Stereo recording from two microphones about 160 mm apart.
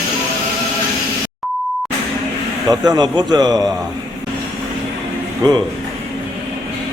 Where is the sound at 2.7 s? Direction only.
25° right (ahead or behind).